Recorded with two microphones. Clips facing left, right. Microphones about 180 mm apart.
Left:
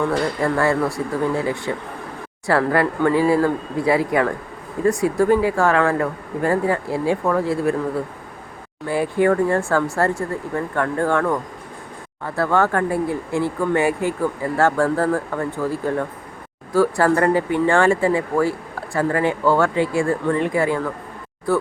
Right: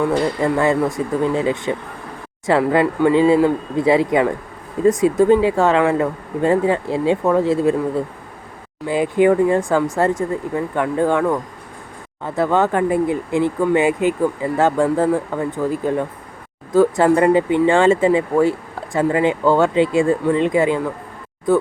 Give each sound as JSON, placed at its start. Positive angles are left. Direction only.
{"t": 0.4, "sound": "speech", "side_deg": -20}
{"t": 8.9, "sound": "speech", "side_deg": -20}